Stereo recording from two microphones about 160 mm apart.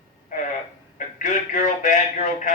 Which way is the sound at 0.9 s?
55° left (ahead or behind).